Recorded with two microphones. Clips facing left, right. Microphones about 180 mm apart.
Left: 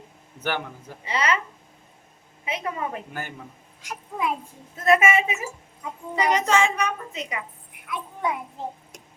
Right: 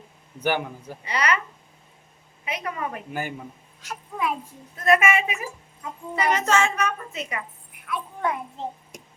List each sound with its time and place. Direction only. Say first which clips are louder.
1.0 s a woman's voice: even; 25° left (ahead or behind)
2.4 s a woman's voice: left 1 dB; 25° left (ahead or behind)
3.1 s a man's voice: right 4 dB; 10° right (ahead or behind)
3.8 s a woman's voice: even; 15° left (ahead or behind)